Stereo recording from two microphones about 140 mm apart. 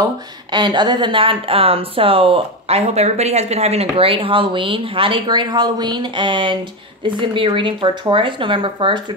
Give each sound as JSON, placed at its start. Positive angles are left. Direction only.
{"t": 0.0, "sound": "speech", "side_deg": -30}